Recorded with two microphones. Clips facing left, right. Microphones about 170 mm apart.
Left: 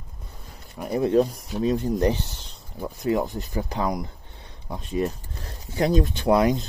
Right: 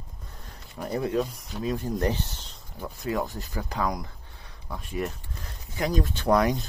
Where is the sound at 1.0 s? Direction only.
35° left (ahead or behind).